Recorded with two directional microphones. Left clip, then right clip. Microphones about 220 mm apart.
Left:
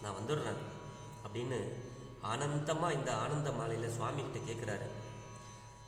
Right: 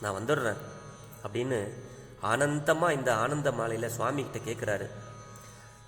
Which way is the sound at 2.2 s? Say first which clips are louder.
Right 11 dB; 40° right (ahead or behind).